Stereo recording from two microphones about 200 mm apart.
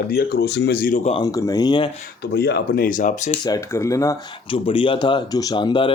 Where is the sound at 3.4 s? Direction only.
15° left (ahead or behind).